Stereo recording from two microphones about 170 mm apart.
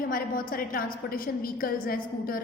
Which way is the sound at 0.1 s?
55° left (ahead or behind).